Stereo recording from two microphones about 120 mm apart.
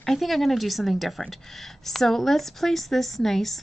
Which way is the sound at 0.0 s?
Centre (ahead or behind).